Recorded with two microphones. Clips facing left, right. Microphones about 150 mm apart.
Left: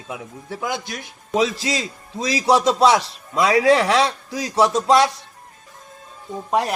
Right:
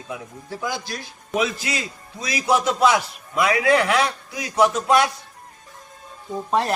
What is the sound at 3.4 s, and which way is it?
A man's voice, 30° left (ahead or behind).